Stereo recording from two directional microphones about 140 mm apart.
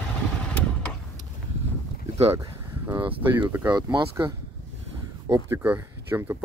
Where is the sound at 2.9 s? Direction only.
35° right (ahead or behind).